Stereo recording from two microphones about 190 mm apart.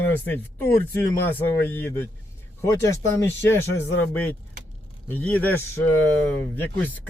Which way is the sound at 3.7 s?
90° left.